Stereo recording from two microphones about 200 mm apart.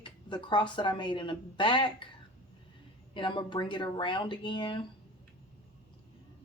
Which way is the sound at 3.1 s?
25° left (ahead or behind).